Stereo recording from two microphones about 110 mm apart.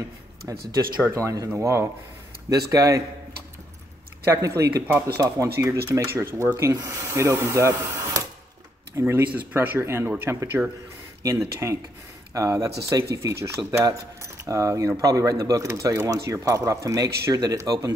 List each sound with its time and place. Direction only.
0.5 s speech: 30° right (ahead or behind)
4.3 s speech: 25° right (ahead or behind)